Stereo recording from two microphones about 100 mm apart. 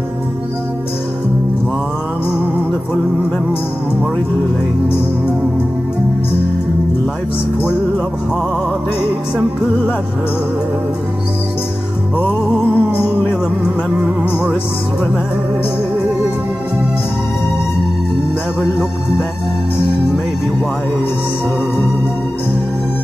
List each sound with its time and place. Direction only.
12.6 s music: 15° right (ahead or behind)
18.6 s music: 10° right (ahead or behind)